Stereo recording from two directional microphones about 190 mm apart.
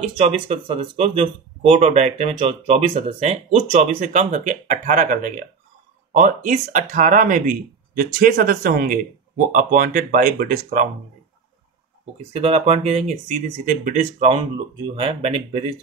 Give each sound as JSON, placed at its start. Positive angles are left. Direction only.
{"t": 0.0, "sound": "speech", "side_deg": -30}
{"t": 12.3, "sound": "speech", "side_deg": -35}